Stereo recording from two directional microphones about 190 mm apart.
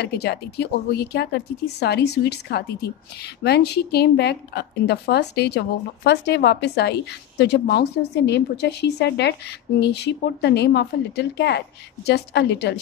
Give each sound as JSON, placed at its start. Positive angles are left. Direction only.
{"t": 0.0, "sound": "a woman's voice", "side_deg": 60}